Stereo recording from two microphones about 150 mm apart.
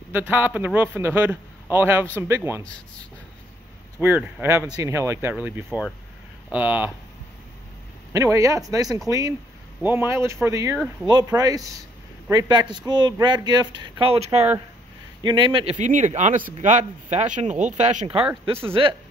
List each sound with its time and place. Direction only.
0.1 s a man's voice: 10° right (ahead or behind)
4.0 s a man's voice: 10° right (ahead or behind)
8.1 s a man's voice: 20° right (ahead or behind); by 14.4 s 45° right (ahead or behind)
15.2 s speech: 30° right (ahead or behind)
15.8 s speech: 55° right (ahead or behind)
18.5 s a man's voice: 15° right (ahead or behind)